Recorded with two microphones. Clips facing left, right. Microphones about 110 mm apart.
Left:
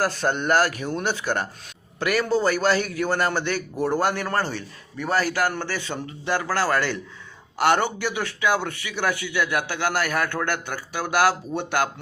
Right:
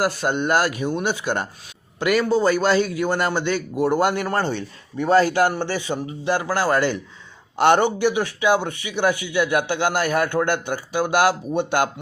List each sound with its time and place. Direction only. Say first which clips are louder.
0.0 s a man's voice: right 2 dB; 15° right (ahead or behind)